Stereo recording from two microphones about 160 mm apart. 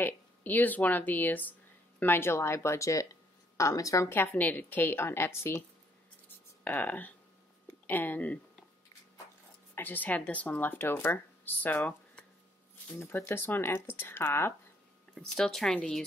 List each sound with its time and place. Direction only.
0.0 s a woman's voice: 10° left (ahead or behind)
6.6 s a woman's voice: 10° left (ahead or behind)
9.8 s a woman's voice: 10° left (ahead or behind)
15.1 s speech: centre (ahead or behind)